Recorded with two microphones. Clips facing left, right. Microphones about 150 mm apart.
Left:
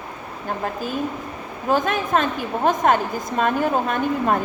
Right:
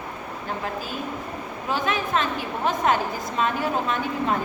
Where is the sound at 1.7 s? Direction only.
45° left (ahead or behind).